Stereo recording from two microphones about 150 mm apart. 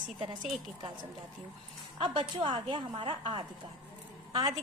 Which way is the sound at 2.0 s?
35° right (ahead or behind).